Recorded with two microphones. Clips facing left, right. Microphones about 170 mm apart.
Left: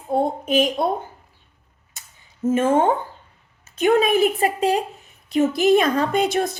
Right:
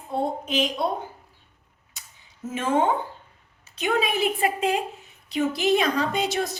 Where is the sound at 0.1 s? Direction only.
50° left (ahead or behind).